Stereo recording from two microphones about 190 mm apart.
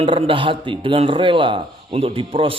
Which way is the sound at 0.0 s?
30° right (ahead or behind).